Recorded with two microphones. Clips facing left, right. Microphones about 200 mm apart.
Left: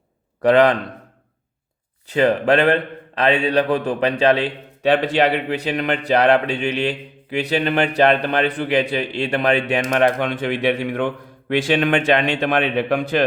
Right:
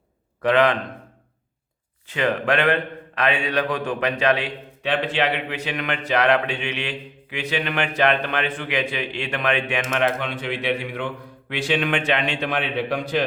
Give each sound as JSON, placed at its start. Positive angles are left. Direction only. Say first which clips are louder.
{"t": 0.4, "sound": "a man's voice", "louder": "left 5 dB", "side_deg": 35}
{"t": 2.0, "sound": "a man's voice", "louder": "left 6 dB", "side_deg": 35}